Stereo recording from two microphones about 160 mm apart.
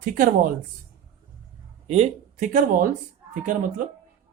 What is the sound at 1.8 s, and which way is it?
Speech, 45° right (ahead or behind).